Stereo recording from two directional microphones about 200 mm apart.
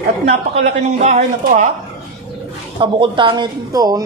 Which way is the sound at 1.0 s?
35° right (ahead or behind).